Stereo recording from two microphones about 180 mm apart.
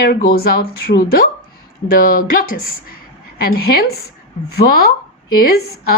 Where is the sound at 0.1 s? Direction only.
55° left (ahead or behind).